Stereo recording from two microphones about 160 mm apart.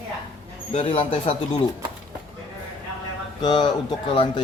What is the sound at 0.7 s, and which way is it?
Speech, 35° left (ahead or behind).